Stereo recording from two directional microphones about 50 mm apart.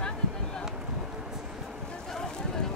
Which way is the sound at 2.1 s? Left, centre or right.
Centre.